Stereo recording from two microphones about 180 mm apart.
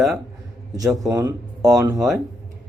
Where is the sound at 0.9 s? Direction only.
Centre (ahead or behind).